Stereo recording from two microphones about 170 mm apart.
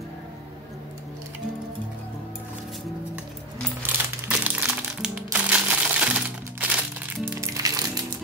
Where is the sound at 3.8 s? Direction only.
10° right (ahead or behind).